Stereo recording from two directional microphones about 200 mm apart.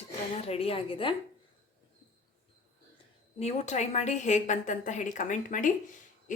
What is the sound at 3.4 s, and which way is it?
A woman's voice, 35° left (ahead or behind).